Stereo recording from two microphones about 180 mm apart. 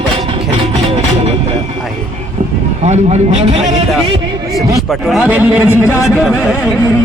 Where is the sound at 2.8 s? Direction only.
40° right (ahead or behind).